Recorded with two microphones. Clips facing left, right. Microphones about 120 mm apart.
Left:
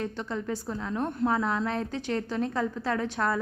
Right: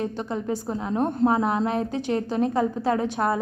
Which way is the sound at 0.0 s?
20° right (ahead or behind).